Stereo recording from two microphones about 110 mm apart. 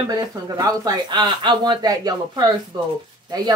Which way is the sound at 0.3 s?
35° right (ahead or behind).